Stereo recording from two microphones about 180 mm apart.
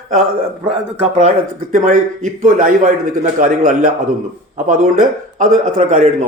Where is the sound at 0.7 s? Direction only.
30° right (ahead or behind).